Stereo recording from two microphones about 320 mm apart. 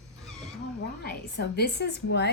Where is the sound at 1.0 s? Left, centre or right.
Left.